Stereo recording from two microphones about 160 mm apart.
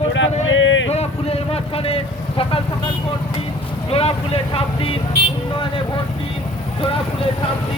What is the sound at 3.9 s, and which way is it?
A man's voice, 40° left (ahead or behind).